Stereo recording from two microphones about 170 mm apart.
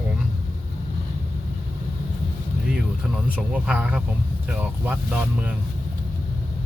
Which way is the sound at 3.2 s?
10° right (ahead or behind).